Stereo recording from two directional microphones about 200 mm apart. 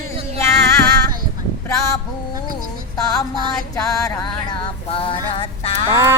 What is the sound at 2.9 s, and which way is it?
Music, 20° left (ahead or behind).